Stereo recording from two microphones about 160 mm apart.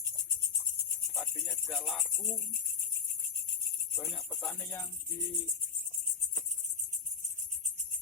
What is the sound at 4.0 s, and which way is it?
Music, centre (ahead or behind).